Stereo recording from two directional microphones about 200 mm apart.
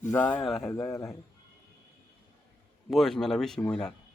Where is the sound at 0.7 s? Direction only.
15° left (ahead or behind).